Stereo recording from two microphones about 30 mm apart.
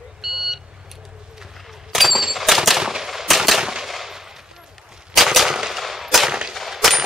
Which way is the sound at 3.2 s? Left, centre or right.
Centre.